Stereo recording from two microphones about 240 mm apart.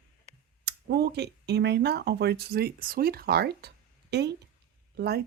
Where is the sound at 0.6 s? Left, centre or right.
Right.